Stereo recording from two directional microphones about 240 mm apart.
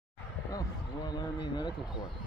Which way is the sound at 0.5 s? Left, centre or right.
Centre.